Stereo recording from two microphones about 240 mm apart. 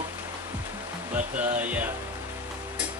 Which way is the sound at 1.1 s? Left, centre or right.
Centre.